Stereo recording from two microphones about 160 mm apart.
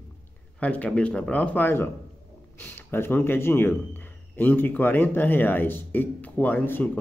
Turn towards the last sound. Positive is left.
turn(degrees=10)  # may be behind; listen again after turning